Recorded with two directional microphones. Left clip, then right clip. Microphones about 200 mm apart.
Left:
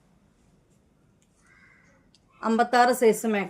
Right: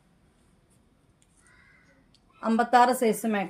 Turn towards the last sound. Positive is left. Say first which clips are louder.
# left 4 dB
turn(degrees=25)  # may be behind; listen again after turning